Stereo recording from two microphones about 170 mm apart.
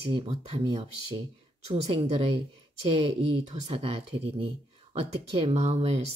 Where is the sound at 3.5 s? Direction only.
35° right (ahead or behind).